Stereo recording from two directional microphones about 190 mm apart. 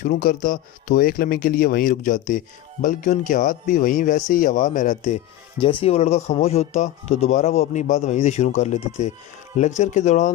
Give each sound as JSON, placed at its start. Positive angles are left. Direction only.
{"t": 0.2, "sound": "speech", "side_deg": 45}
{"t": 5.5, "sound": "speech", "side_deg": 30}